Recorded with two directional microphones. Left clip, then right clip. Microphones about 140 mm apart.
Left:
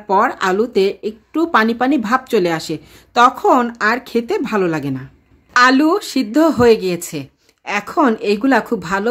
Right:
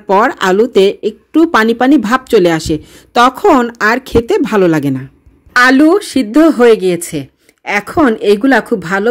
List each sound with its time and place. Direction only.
0.0 s speech: 40° right (ahead or behind)
5.5 s speech: 30° right (ahead or behind)